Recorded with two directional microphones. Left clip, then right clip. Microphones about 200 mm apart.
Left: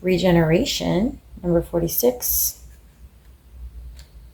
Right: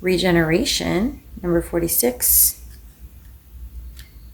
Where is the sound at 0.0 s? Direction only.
30° right (ahead or behind).